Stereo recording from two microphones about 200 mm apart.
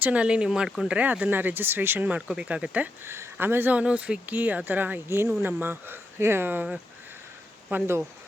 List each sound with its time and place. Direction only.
0.0 s speech: 5° right (ahead or behind)